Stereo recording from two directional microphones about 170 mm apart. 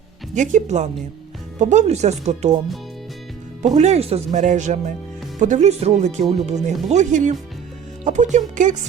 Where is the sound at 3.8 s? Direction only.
40° right (ahead or behind).